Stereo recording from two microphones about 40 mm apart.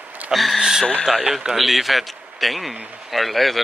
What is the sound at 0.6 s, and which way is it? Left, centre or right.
Speech, centre.